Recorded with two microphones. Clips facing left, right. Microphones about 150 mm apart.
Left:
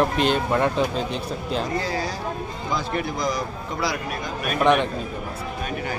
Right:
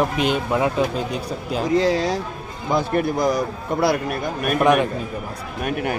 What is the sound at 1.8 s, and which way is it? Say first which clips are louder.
Speech: right 8 dB; 90° right.